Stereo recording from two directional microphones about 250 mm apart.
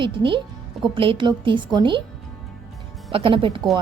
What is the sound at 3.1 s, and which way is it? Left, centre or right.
Speech, right.